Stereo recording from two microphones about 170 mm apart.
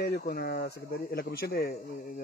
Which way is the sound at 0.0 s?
65° left (ahead or behind).